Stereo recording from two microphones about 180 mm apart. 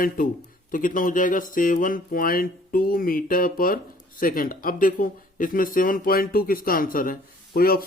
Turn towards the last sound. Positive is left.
turn(degrees=55)  # may be behind; listen again after turning